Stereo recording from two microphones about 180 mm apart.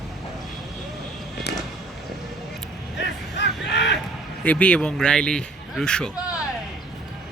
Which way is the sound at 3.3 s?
75° left (ahead or behind).